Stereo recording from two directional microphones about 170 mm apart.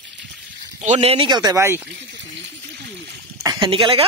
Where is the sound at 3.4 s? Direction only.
25° right (ahead or behind).